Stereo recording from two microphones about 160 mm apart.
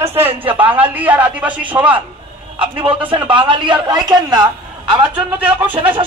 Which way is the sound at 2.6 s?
30° right (ahead or behind).